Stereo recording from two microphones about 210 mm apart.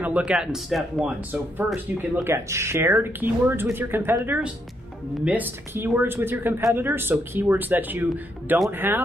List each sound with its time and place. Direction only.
0.0 s speech: 5° right (ahead or behind)